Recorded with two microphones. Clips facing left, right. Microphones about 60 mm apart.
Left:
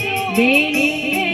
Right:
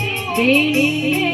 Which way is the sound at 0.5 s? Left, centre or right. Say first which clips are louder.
Right 1 dB; centre.